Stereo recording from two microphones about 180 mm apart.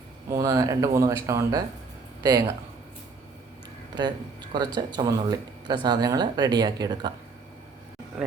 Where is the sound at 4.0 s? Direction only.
25° right (ahead or behind).